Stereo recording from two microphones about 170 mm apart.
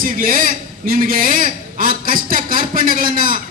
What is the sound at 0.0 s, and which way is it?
A man's voice, 55° right (ahead or behind).